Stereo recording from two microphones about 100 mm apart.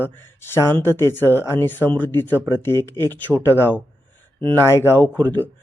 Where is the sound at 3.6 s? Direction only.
20° left (ahead or behind).